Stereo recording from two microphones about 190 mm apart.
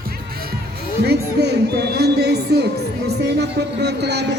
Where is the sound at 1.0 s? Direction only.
60° right (ahead or behind).